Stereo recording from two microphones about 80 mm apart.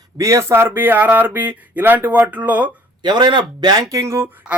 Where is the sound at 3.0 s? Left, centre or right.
Right.